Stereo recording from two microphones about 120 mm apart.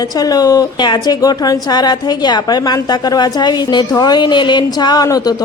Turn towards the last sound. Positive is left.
turn(degrees=30)  # may be behind; listen again after turning